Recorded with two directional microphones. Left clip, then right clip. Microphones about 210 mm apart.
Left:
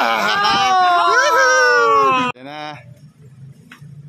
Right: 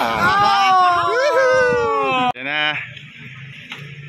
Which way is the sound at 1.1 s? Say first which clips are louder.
Left 2 dB; 35° left (ahead or behind).